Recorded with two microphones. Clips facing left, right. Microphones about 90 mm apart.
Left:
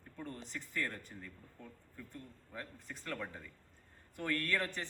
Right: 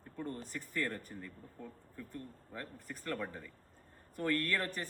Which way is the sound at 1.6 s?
35° right (ahead or behind).